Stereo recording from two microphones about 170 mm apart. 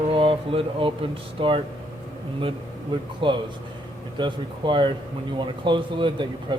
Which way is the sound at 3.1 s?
30° right (ahead or behind).